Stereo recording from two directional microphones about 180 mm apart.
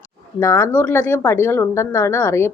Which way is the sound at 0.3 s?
15° left (ahead or behind).